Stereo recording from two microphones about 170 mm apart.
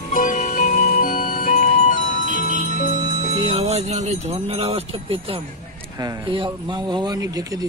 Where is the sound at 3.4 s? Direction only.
35° right (ahead or behind).